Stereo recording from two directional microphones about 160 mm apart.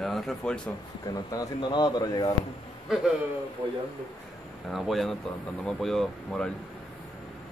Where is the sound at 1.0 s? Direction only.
25° left (ahead or behind).